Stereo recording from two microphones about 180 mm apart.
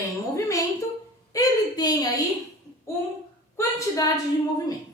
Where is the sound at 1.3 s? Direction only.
20° left (ahead or behind).